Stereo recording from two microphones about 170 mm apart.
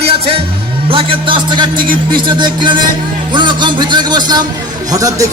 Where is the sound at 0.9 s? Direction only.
30° right (ahead or behind).